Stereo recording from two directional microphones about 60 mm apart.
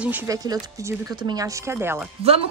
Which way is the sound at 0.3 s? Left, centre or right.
Right.